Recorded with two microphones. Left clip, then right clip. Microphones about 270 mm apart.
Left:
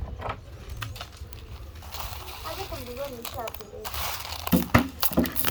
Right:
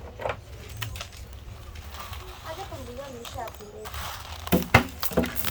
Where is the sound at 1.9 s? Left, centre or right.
Left.